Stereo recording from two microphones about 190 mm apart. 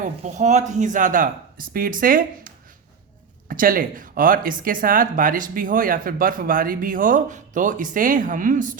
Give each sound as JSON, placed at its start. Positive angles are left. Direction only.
{"t": 0.0, "sound": "speech", "side_deg": -40}
{"t": 3.5, "sound": "speech", "side_deg": -45}